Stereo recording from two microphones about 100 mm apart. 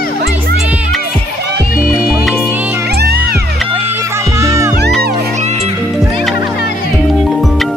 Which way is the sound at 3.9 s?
25° right (ahead or behind).